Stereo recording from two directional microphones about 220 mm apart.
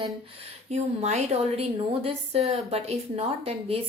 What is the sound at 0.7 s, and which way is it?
A woman's voice, 30° right (ahead or behind).